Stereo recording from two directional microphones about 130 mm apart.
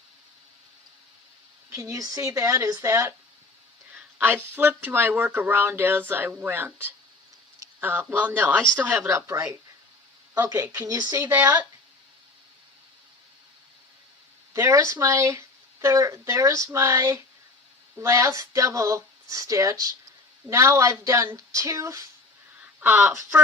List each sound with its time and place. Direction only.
1.7 s speech: 25° right (ahead or behind)
14.5 s speech: 20° right (ahead or behind)
22.5 s speech: 10° right (ahead or behind)